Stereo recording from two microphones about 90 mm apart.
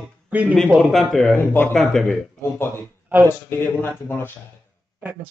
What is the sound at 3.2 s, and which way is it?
Speech, 25° left (ahead or behind).